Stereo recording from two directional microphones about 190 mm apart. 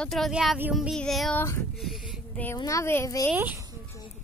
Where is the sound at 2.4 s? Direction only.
15° left (ahead or behind).